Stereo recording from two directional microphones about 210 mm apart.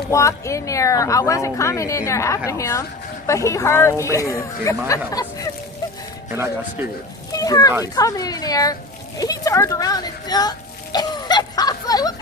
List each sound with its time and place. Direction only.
0.1 s a woman's voice: 15° left (ahead or behind)
6.3 s speech: 10° right (ahead or behind)
7.3 s a woman's voice: 15° left (ahead or behind)
10.9 s a sound: 20° left (ahead or behind)